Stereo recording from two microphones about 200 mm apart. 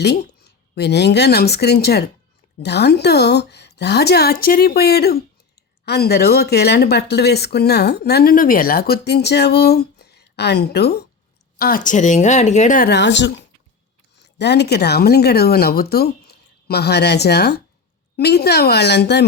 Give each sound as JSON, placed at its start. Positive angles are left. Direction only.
{"t": 0.0, "sound": "a woman's voice", "side_deg": 55}